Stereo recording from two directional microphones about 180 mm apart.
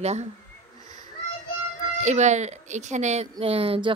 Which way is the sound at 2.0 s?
40° right (ahead or behind).